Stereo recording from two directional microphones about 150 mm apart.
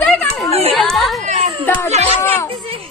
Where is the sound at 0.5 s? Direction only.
45° right (ahead or behind).